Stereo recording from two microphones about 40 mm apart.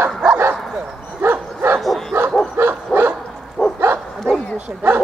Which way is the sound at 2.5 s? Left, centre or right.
Right.